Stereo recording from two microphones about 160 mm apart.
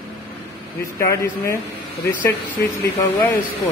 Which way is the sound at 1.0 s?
20° left (ahead or behind).